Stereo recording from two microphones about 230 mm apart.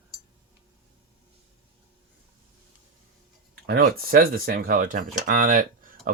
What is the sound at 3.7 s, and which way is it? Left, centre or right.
Speech, right.